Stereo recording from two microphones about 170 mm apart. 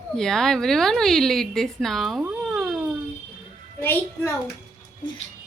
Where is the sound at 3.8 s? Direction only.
15° left (ahead or behind).